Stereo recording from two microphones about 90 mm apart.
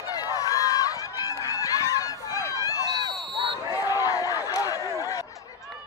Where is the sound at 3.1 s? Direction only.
Centre (ahead or behind).